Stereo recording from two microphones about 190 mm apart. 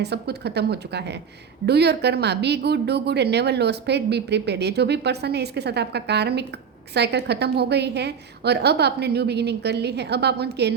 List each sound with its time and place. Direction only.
0.0 s a woman's voice: 60° right (ahead or behind)